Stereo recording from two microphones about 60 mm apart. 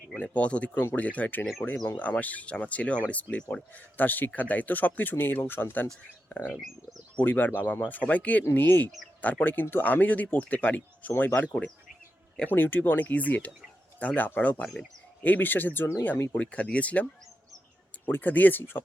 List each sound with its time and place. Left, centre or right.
0.2 s speech: left
0.7 s speech: left
12.5 s speech: left
14.6 s speech: centre
15.2 s speech: left
16.3 s speech: left